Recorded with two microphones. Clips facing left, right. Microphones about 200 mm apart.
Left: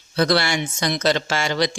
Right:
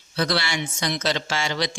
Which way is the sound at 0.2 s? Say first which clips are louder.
Left 5 dB; 50° left (ahead or behind).